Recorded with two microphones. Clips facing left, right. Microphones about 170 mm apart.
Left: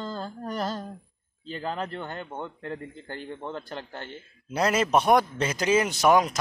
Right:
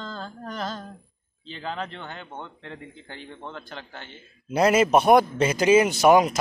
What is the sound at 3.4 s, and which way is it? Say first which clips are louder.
Mantra: left 3 dB; 15° left (ahead or behind).